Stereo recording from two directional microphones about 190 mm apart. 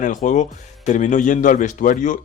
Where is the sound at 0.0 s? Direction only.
40° left (ahead or behind).